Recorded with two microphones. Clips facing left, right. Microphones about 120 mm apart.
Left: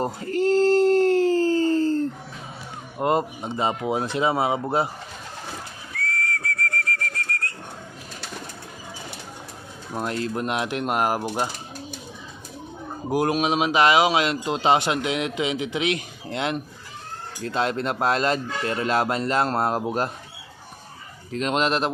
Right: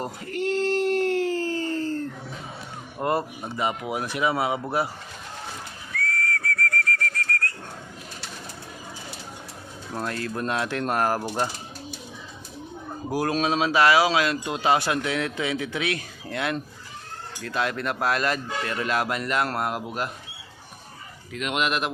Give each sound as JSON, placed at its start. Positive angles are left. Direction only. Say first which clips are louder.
{"t": 0.0, "sound": "a sound", "louder": "left 6 dB", "side_deg": 30}
{"t": 3.0, "sound": "speech", "louder": "left 3 dB", "side_deg": 20}
{"t": 6.0, "sound": "a sound", "louder": "even", "side_deg": 25}
{"t": 9.9, "sound": "speech", "louder": "left 3 dB", "side_deg": 20}
{"t": 13.1, "sound": "speech", "louder": "left 2 dB", "side_deg": 20}
{"t": 21.3, "sound": "speech", "louder": "left 4 dB", "side_deg": 35}